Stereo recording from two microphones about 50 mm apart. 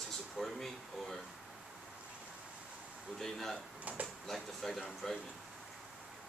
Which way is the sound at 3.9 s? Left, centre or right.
Right.